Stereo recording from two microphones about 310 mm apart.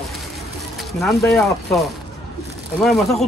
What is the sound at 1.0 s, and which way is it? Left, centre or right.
Speech, centre.